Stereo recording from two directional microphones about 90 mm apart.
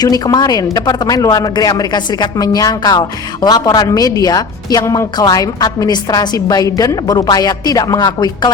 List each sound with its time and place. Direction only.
0.0 s a woman's voice: 50° left (ahead or behind)
3.8 s a woman's voice: 40° left (ahead or behind)